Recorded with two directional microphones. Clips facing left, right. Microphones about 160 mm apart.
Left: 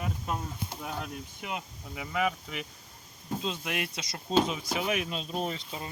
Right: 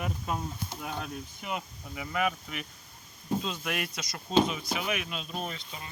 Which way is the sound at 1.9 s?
25° left (ahead or behind).